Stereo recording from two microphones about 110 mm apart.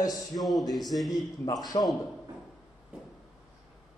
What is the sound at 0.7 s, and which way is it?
Speech, centre (ahead or behind).